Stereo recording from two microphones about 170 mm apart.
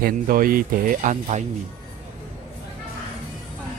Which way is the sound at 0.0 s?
55° right (ahead or behind).